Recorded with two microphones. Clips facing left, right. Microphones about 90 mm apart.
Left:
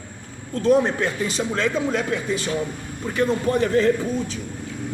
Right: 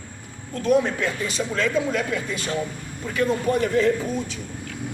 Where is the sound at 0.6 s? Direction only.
30° left (ahead or behind).